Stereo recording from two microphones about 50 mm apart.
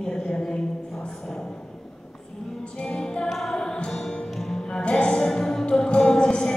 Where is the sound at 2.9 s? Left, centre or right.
Centre.